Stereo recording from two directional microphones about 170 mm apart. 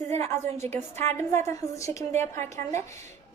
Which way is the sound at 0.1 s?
40° right (ahead or behind).